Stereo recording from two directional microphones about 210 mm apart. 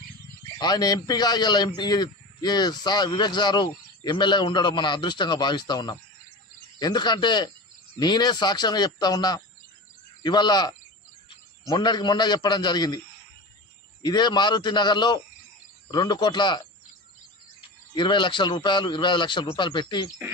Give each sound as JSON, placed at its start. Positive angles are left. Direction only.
{"t": 0.6, "sound": "a man's voice", "side_deg": 20}
{"t": 14.0, "sound": "a man's voice", "side_deg": 20}
{"t": 17.9, "sound": "a man's voice", "side_deg": 20}